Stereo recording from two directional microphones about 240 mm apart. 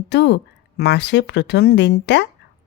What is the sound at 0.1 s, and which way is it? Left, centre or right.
Speech, left.